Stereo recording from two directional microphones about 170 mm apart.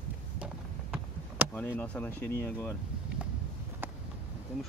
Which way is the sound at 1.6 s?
10° left (ahead or behind).